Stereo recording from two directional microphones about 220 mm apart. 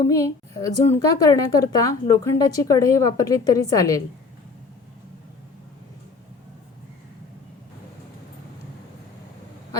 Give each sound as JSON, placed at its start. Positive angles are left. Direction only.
{"t": 0.0, "sound": "a woman's voice", "side_deg": 15}